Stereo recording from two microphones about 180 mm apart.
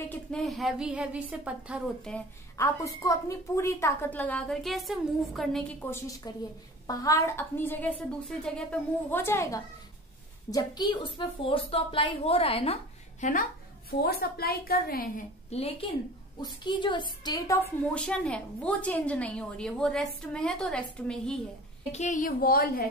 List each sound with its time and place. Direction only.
0.1 s a woman's voice: 5° left (ahead or behind)
2.1 s a woman's voice: 5° left (ahead or behind)
2.5 s a woman's voice: 15° left (ahead or behind)
6.2 s a woman's voice: 20° left (ahead or behind)
13.2 s a woman's voice: 50° left (ahead or behind)
15.5 s a woman's voice: 35° left (ahead or behind)
17.9 s a woman's voice: 5° left (ahead or behind)
21.9 s a woman's voice: 45° left (ahead or behind)